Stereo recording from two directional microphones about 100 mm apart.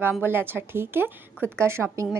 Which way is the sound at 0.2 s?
20° right (ahead or behind).